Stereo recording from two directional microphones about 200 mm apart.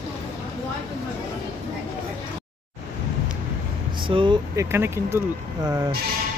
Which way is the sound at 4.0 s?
25° right (ahead or behind).